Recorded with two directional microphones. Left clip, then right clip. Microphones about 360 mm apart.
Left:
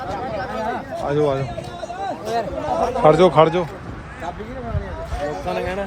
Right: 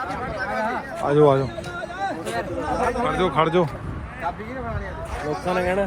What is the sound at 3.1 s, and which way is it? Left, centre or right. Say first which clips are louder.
Speech: left 12 dB; centre.